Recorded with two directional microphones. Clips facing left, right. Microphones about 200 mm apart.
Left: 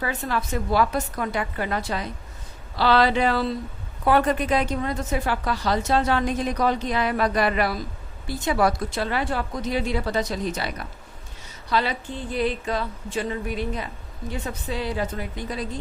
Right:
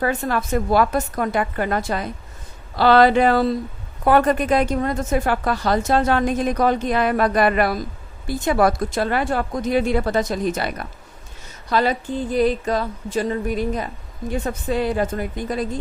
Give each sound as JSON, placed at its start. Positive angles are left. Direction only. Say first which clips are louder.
{"t": 0.0, "sound": "a woman's voice", "louder": "right 5 dB", "side_deg": -50}